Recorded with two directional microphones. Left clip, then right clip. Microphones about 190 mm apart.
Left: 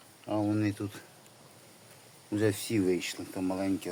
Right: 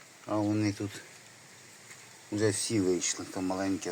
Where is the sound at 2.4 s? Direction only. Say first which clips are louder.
Even; 15° left (ahead or behind).